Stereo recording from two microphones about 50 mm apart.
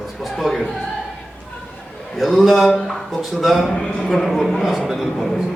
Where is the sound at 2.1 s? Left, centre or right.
Centre.